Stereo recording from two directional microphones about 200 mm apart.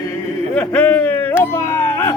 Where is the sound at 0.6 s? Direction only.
10° left (ahead or behind).